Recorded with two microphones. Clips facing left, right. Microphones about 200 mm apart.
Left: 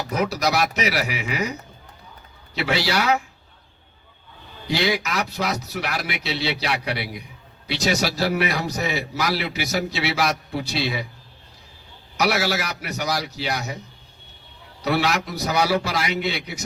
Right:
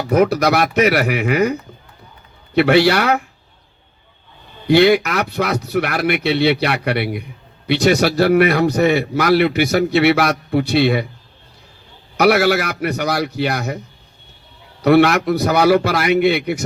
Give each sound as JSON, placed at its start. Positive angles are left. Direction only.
{"t": 0.1, "sound": "a man's voice", "side_deg": -55}
{"t": 2.6, "sound": "a man's voice", "side_deg": -60}
{"t": 4.7, "sound": "a man's voice", "side_deg": -60}
{"t": 12.1, "sound": "a man's voice", "side_deg": -55}
{"t": 14.8, "sound": "a man's voice", "side_deg": -55}